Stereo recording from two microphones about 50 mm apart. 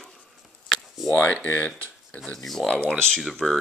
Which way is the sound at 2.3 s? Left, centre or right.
Centre.